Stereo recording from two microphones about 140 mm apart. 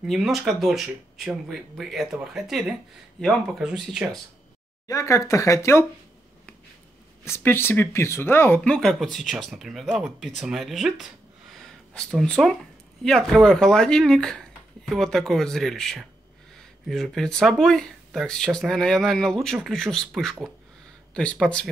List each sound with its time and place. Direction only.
0.0 s speech: centre (ahead or behind)
4.8 s speech: 20° left (ahead or behind)
7.2 s speech: 20° left (ahead or behind)